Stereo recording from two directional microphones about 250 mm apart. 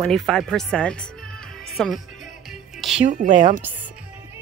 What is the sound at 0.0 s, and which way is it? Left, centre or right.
Speech, centre.